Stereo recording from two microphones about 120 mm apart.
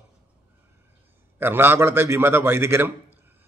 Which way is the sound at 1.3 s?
15° right (ahead or behind).